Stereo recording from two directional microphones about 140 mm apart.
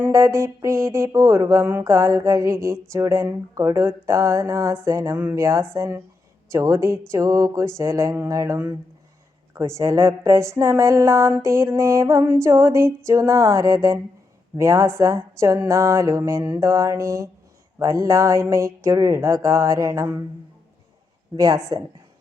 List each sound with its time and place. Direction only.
0.0 s speech: 20° right (ahead or behind)
21.3 s speech: 25° right (ahead or behind)